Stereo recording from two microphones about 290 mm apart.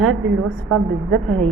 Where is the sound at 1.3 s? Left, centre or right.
Centre.